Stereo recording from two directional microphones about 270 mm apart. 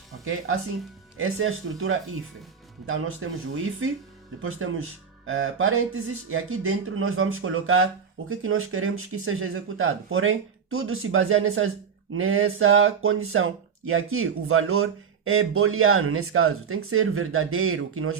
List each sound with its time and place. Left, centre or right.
0.3 s speech: right